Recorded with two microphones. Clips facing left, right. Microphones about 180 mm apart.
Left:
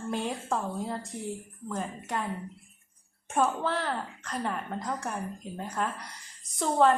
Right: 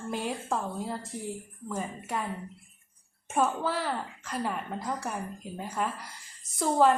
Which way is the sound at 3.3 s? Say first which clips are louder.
Even; 5° right (ahead or behind).